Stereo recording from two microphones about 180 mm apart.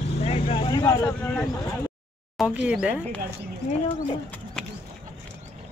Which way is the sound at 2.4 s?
5° right (ahead or behind).